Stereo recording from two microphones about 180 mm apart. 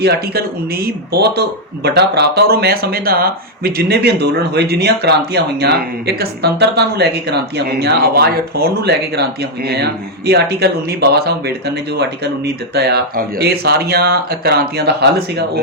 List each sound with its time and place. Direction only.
0.0 s a man's voice: 60° right (ahead or behind)